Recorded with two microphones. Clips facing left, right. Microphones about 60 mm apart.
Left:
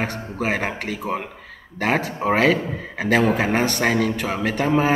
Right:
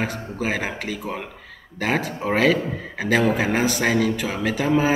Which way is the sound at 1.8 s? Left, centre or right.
Centre.